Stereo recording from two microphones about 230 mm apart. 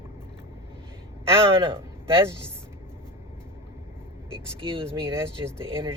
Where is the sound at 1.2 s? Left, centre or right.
Right.